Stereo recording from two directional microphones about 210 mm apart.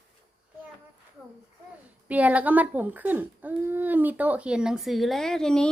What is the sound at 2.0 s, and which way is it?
Speech, 5° right (ahead or behind).